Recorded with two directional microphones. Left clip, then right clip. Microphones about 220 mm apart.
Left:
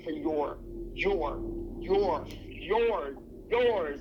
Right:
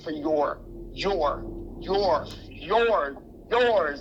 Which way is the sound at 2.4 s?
90° right.